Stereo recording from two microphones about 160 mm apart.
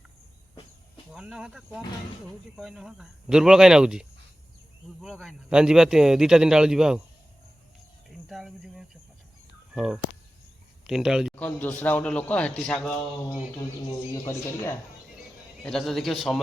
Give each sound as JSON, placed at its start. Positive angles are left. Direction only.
{"t": 1.1, "sound": "speech", "side_deg": -5}
{"t": 5.0, "sound": "speech", "side_deg": 0}
{"t": 8.3, "sound": "speech", "side_deg": 0}
{"t": 11.3, "sound": "a man's voice", "side_deg": 10}
{"t": 14.3, "sound": "a man's voice", "side_deg": 15}
{"t": 15.6, "sound": "speech", "side_deg": 5}